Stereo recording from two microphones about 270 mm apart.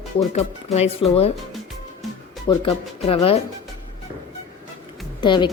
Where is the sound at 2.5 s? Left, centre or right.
Centre.